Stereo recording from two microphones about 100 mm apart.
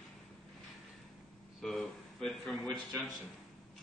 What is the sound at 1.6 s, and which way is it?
A man's voice, 5° left (ahead or behind).